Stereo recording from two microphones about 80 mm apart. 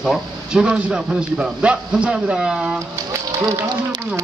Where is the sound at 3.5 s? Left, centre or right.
Right.